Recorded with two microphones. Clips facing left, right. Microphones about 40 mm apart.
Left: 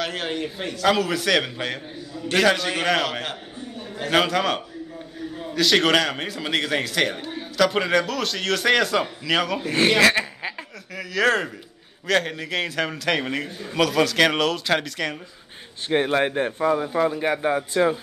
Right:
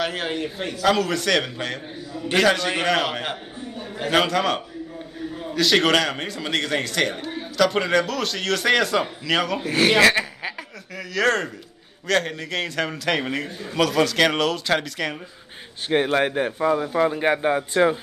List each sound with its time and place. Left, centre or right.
0.0 s a man's voice: centre
3.1 s speech: centre
4.1 s a man's voice: centre
10.1 s a man's voice: centre
17.0 s speech: right